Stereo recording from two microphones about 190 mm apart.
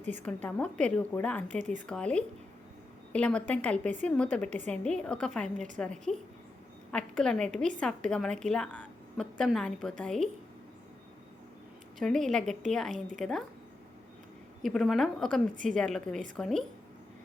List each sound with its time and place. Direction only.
0.1 s a woman's voice: 10° left (ahead or behind)
1.5 s speech: 40° right (ahead or behind)
1.9 s a woman's voice: 5° left (ahead or behind)
11.9 s a woman's voice: centre (ahead or behind)
14.6 s a woman's voice: centre (ahead or behind)